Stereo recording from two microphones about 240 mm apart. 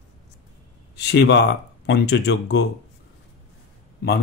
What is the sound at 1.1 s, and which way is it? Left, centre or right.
Speech, left.